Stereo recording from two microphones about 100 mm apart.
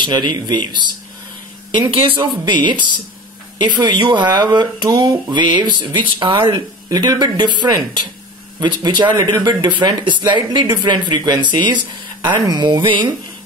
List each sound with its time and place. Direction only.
0.0 s speech: 50° right (ahead or behind)